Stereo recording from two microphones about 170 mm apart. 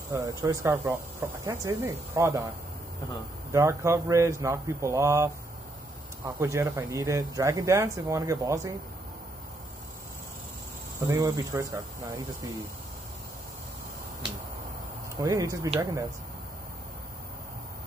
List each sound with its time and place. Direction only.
0.1 s speech: 20° right (ahead or behind)
3.5 s speech: 15° right (ahead or behind)
11.1 s speech: 20° right (ahead or behind)
15.1 s speech: 20° right (ahead or behind)